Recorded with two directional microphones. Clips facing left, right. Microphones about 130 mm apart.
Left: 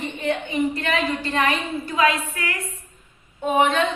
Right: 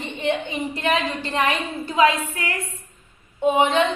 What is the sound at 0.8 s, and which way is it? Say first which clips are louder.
Speech: right 1 dB; 15° right (ahead or behind).